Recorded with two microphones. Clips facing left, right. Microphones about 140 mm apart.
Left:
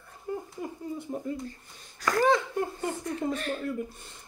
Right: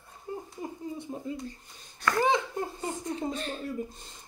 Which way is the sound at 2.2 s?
15° right (ahead or behind).